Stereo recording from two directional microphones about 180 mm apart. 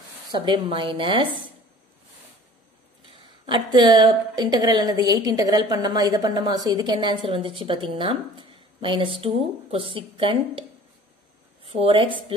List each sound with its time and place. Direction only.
0.3 s a woman's voice: 25° right (ahead or behind)
3.4 s a woman's voice: 25° right (ahead or behind)
11.6 s a woman's voice: 30° right (ahead or behind)